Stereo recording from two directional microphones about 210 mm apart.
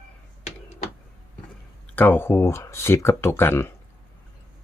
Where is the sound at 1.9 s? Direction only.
10° left (ahead or behind).